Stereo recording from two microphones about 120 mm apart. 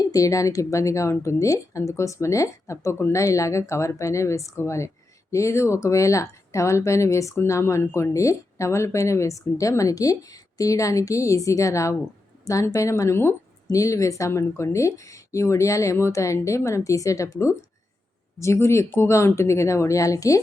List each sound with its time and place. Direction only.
0.0 s speech: 30° left (ahead or behind)
18.3 s speech: 25° left (ahead or behind)